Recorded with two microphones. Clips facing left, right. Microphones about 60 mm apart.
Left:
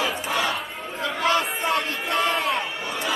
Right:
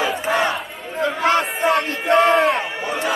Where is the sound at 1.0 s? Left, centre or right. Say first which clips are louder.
Right 5 dB; right.